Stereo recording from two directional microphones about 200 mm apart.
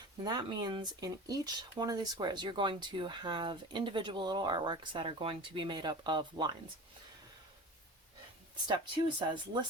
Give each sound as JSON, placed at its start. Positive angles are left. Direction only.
{"t": 0.3, "sound": "speech", "side_deg": -20}
{"t": 8.6, "sound": "speech", "side_deg": -20}